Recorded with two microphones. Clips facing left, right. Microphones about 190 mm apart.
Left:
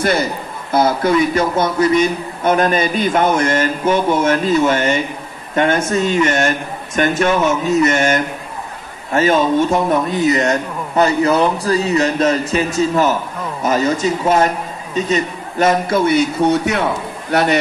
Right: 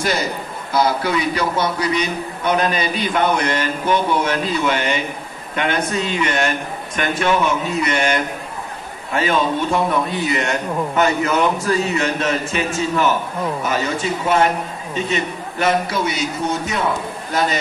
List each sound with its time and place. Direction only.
0.0 s a man's voice: 55° left (ahead or behind)
7.7 s a man's voice: 45° left (ahead or behind); by 17.6 s 65° left (ahead or behind)